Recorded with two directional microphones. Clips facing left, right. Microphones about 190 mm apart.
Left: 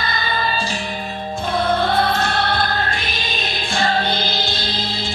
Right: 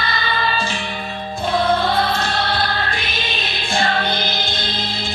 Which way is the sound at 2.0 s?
55° left (ahead or behind).